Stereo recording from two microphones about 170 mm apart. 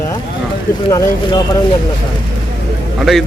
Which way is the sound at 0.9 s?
25° left (ahead or behind).